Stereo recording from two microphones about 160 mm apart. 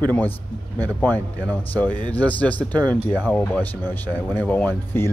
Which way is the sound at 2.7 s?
25° right (ahead or behind).